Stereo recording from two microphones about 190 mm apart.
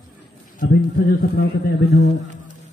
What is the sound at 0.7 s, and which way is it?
Speech, 55° left (ahead or behind).